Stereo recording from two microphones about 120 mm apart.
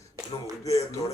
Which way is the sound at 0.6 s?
25° left (ahead or behind).